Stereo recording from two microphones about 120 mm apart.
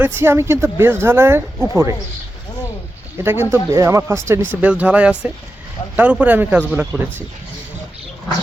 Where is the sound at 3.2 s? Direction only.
20° right (ahead or behind).